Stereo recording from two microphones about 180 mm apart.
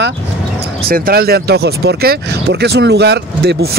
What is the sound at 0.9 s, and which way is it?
Speech, 55° right (ahead or behind).